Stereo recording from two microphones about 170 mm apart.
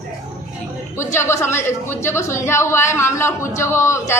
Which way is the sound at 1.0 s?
15° left (ahead or behind).